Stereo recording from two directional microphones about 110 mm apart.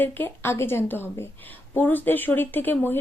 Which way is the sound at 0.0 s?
20° left (ahead or behind).